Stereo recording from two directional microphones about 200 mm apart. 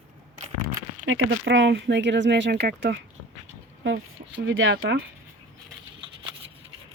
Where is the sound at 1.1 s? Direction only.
80° right; by 3.0 s 55° right (ahead or behind).